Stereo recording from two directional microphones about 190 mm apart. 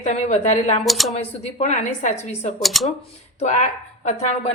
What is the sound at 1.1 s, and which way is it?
A woman's voice, 35° left (ahead or behind).